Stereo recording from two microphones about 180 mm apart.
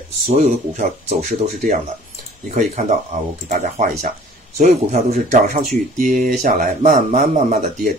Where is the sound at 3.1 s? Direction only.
45° right (ahead or behind).